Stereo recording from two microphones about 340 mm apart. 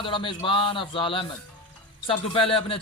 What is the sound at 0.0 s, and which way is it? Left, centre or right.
A man's voice, centre.